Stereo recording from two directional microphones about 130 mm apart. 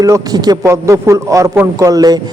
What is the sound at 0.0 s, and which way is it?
A man's voice, 25° right (ahead or behind).